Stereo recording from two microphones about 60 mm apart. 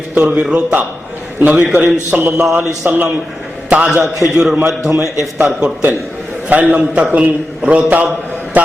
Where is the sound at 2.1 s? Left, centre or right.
Right.